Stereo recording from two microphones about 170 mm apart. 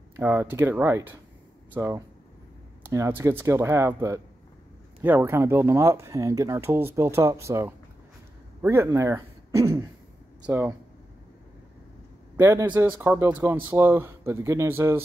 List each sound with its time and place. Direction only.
0.1 s a man's voice: 15° right (ahead or behind)
12.4 s a man's voice: 15° right (ahead or behind)